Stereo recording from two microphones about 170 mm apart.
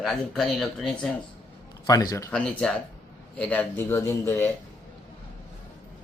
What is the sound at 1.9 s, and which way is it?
Speech, 20° left (ahead or behind).